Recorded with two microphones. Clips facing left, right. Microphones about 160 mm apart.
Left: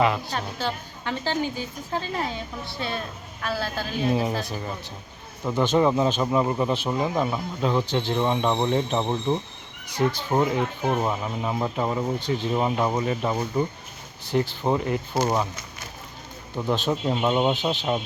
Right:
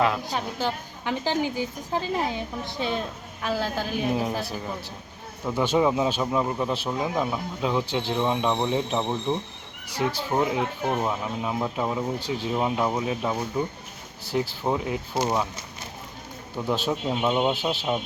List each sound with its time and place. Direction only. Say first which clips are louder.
0.3 s a woman's voice: right 1 dB; 15° right (ahead or behind)
4.1 s speech: left 2 dB; centre (ahead or behind)
9.8 s speech: left 2 dB; 5° right (ahead or behind)
16.6 s speech: left 1 dB; 5° right (ahead or behind)